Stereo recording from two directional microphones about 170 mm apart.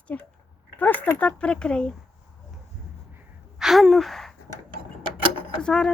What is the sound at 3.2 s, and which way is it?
Gasp, centre (ahead or behind).